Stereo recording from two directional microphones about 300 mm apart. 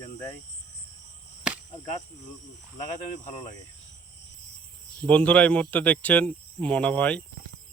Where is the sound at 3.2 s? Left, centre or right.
Centre.